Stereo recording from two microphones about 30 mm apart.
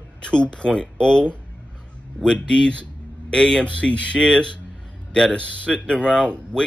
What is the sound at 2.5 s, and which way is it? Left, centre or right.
Speech, left.